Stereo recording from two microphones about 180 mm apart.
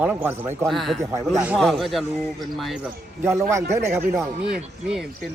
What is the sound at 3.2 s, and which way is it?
Speech, 15° right (ahead or behind).